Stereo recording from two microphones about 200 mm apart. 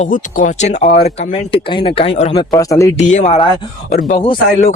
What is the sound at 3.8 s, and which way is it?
Speech, 45° left (ahead or behind).